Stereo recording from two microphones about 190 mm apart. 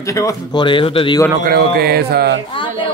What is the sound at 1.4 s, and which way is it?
Speech, 55° right (ahead or behind).